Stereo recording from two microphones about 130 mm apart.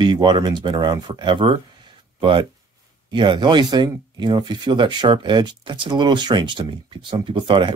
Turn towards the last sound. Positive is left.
turn(degrees=-40)  # may be behind; listen again after turning